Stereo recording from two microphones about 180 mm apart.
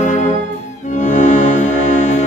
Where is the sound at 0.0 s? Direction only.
45° left (ahead or behind).